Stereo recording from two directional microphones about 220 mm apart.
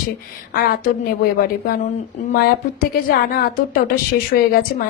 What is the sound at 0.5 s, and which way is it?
Speech, 40° left (ahead or behind).